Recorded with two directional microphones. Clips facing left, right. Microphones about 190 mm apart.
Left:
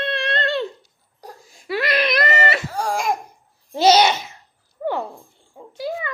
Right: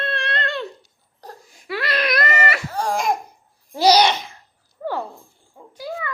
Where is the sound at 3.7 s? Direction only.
25° left (ahead or behind).